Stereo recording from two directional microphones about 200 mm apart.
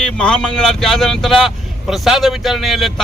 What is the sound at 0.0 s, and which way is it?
Speech, 5° left (ahead or behind).